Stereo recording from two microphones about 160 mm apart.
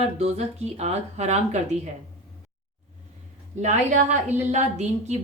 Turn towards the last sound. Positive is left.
turn(degrees=-45)  # may be behind; listen again after turning